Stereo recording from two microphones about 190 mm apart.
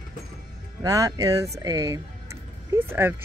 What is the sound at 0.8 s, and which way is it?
Speech, 20° right (ahead or behind).